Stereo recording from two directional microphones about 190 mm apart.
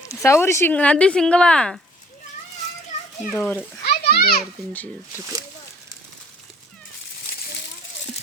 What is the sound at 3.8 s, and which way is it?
Children playing, 55° left (ahead or behind).